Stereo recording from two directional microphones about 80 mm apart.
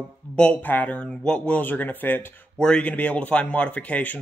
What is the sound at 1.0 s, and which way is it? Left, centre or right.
Speech, centre.